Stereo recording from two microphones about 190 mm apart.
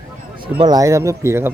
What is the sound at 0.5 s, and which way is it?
Speech, 20° right (ahead or behind).